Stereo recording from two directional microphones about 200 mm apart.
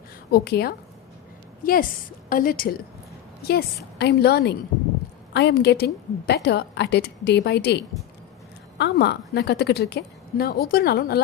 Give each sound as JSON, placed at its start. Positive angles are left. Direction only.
{"t": 0.3, "sound": "a woman's voice", "side_deg": 50}
{"t": 3.9, "sound": "a woman's voice", "side_deg": 55}